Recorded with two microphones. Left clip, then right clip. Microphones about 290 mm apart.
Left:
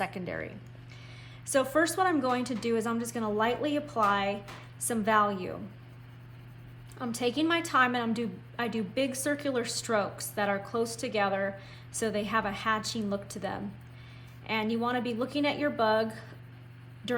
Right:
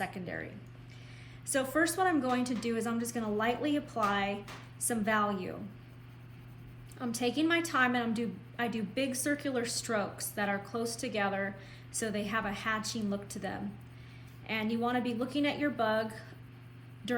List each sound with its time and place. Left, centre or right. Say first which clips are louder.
0.0 s a woman's voice: left 4 dB; centre
1.5 s a woman's voice: left 4 dB; centre
7.0 s a woman's voice: left 2 dB; centre